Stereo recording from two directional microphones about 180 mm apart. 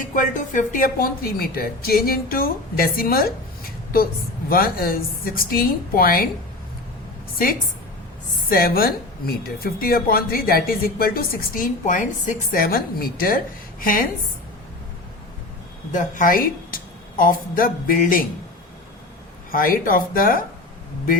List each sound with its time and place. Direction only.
0.0 s a woman's voice: 45° left (ahead or behind)
8.4 s speech: 55° left (ahead or behind)
15.9 s a woman's voice: 45° left (ahead or behind)
19.5 s a woman's voice: 55° left (ahead or behind)